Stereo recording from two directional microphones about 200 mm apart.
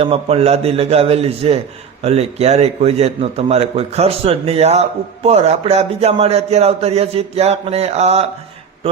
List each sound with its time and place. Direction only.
0.0 s a man's voice: 30° right (ahead or behind)